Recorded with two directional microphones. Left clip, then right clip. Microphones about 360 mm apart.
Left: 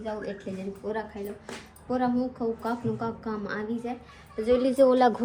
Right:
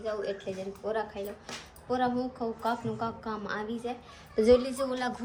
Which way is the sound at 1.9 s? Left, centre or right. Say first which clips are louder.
Left 2 dB; centre.